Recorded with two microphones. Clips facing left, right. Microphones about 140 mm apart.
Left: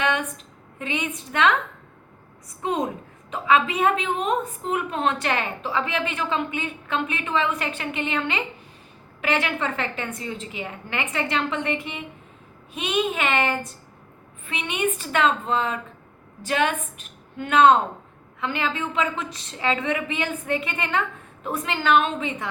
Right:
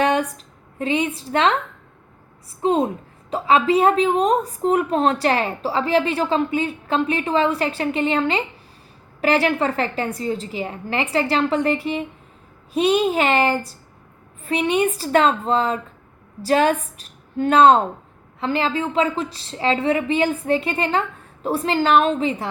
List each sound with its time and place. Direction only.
0.0 s a sound: 35° right (ahead or behind)
0.8 s a woman's voice: 35° right (ahead or behind)
2.6 s a woman's voice: 30° right (ahead or behind)